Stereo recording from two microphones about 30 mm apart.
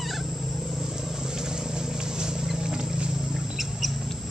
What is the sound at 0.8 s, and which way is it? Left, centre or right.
Vehicle, centre.